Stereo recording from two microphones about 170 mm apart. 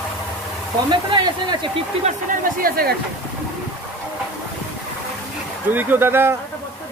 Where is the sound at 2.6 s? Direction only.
60° right (ahead or behind).